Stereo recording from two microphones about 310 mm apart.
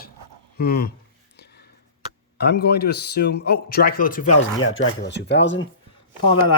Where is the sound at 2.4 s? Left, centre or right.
Left.